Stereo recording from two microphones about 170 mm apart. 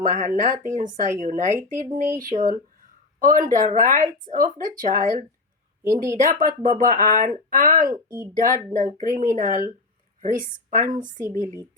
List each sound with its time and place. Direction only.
0.0 s speech: 50° right (ahead or behind)
5.8 s speech: 15° right (ahead or behind)
6.2 s speech: 50° right (ahead or behind)
10.7 s a woman's voice: 55° right (ahead or behind)
11.3 s speech: 20° left (ahead or behind)